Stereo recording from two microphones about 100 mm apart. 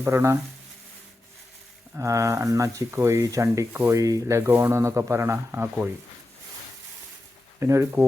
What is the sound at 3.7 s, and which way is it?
Speech, 20° right (ahead or behind).